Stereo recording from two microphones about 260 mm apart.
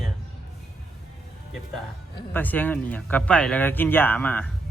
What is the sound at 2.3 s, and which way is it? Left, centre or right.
Speech, centre.